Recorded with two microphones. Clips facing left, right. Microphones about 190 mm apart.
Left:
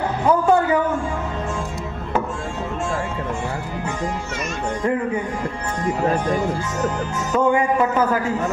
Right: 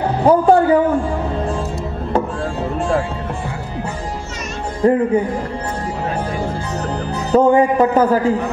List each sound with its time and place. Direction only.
0.2 s a sound: 35° right (ahead or behind)
4.8 s a man's voice: 35° right (ahead or behind)
7.3 s a man's voice: 35° right (ahead or behind)